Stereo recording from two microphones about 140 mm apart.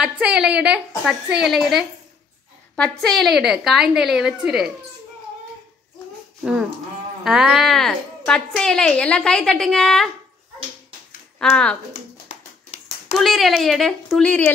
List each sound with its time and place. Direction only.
0.0 s a woman's voice: 5° right (ahead or behind)
7.2 s a woman's voice: 5° right (ahead or behind)
11.3 s speech: 5° left (ahead or behind)
12.3 s a sound: 50° left (ahead or behind)
13.2 s a woman's voice: centre (ahead or behind)